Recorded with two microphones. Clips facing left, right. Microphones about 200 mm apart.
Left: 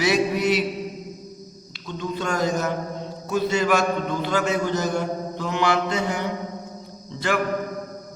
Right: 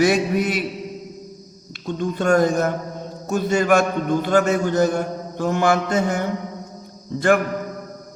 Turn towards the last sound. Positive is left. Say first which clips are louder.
# right 7 dB
turn(degrees=-50)  # may be behind; listen again after turning